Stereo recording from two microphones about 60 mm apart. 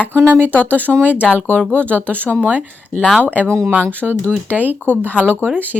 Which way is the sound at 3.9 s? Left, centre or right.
Right.